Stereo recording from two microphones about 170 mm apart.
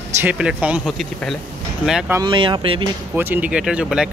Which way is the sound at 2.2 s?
30° right (ahead or behind).